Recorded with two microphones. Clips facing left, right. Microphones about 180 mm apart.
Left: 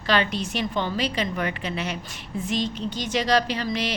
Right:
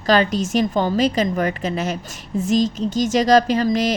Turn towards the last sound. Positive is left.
turn(degrees=-45)  # may be behind; listen again after turning